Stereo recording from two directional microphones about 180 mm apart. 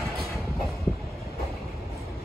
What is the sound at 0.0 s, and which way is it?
Train, centre (ahead or behind).